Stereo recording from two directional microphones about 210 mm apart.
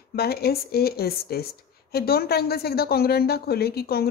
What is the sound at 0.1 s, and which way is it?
Speech, 50° left (ahead or behind).